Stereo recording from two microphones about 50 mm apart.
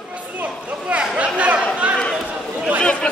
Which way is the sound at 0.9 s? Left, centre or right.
Right.